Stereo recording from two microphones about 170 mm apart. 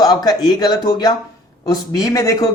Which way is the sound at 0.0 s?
20° left (ahead or behind).